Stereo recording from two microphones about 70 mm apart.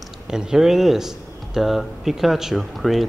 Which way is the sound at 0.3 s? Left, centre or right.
Centre.